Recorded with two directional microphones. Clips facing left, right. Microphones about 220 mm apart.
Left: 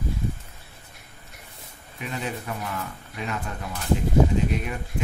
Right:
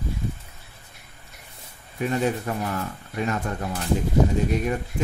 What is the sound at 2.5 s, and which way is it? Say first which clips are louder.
Speech: right 5 dB; 40° right (ahead or behind).